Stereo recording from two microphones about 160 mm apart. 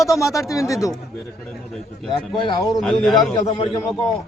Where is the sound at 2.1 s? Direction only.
30° left (ahead or behind).